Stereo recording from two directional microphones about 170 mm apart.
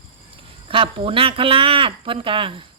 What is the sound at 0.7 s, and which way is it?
A woman's voice, 30° right (ahead or behind).